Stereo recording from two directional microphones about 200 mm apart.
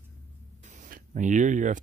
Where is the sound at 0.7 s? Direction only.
40° right (ahead or behind).